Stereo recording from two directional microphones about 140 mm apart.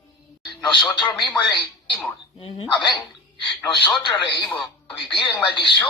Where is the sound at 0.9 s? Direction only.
35° left (ahead or behind).